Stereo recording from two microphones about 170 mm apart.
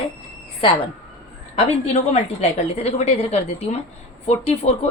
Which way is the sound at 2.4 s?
40° left (ahead or behind).